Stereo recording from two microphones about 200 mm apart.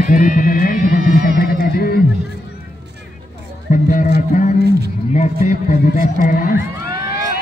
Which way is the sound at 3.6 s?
40° left (ahead or behind).